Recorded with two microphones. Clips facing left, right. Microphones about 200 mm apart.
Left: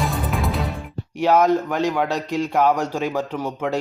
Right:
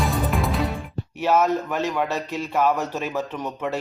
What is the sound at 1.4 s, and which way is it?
A man's voice, 15° left (ahead or behind).